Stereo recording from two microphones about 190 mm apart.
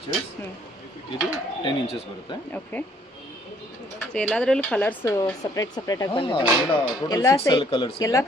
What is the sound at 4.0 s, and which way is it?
Speech, 5° left (ahead or behind).